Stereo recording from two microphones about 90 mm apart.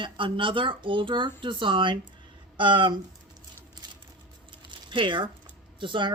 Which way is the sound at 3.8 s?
50° right (ahead or behind).